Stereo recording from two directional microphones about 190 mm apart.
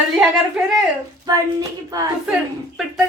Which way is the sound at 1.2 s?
20° right (ahead or behind).